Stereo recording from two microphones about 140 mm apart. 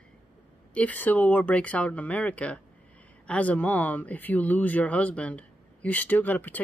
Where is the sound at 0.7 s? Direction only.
10° left (ahead or behind).